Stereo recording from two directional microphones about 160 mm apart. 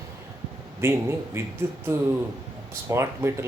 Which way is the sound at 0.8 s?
15° right (ahead or behind).